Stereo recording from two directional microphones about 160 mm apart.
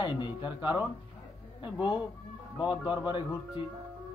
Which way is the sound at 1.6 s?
30° left (ahead or behind).